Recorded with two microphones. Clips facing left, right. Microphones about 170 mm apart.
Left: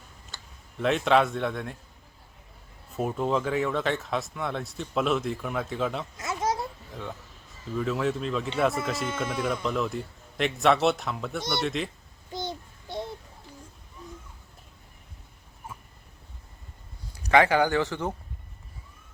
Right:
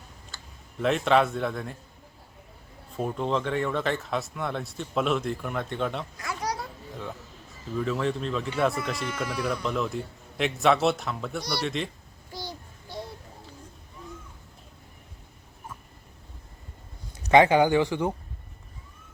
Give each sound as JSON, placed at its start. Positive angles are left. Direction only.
{"t": 0.8, "sound": "speech", "side_deg": 0}
{"t": 2.9, "sound": "speech", "side_deg": 5}
{"t": 6.1, "sound": "a sound", "side_deg": 20}
{"t": 6.9, "sound": "speech", "side_deg": 0}
{"t": 12.3, "sound": "child singing", "side_deg": 20}
{"t": 17.2, "sound": "speech", "side_deg": -20}